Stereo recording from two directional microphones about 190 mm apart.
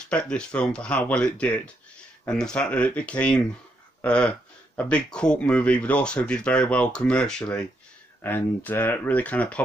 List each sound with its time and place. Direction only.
0.1 s speech: 5° left (ahead or behind)